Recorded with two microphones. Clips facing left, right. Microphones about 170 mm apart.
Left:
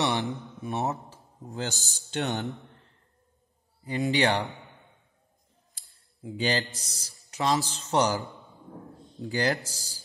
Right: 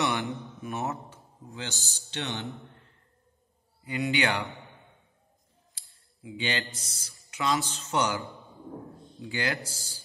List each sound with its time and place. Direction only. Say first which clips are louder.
0.6 s speech: left 4 dB; 35° left (ahead or behind)
3.8 s speech: left 3 dB; 40° left (ahead or behind)
5.8 s speech: left 6 dB; 45° left (ahead or behind)